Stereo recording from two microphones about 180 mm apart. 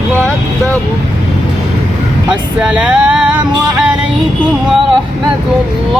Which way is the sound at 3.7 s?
5° right (ahead or behind).